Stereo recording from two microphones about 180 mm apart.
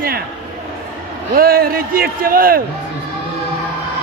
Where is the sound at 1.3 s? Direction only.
55° right (ahead or behind).